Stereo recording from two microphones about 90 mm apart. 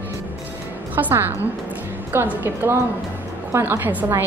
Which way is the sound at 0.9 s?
20° right (ahead or behind).